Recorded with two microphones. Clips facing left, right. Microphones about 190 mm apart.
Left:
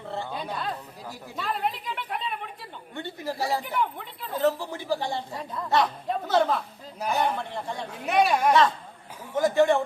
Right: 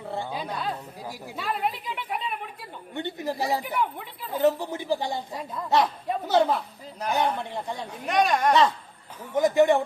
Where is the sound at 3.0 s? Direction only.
20° right (ahead or behind).